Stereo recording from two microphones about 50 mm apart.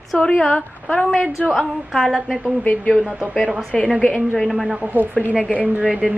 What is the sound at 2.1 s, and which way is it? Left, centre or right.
Speech, centre.